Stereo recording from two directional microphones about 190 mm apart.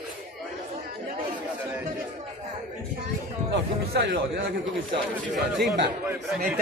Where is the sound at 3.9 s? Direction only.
65° right (ahead or behind).